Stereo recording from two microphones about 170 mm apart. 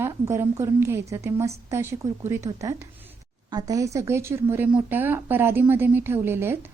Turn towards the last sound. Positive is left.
turn(degrees=-15)  # may be behind; listen again after turning